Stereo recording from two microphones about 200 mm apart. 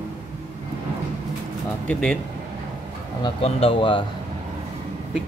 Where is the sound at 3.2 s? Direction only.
30° left (ahead or behind).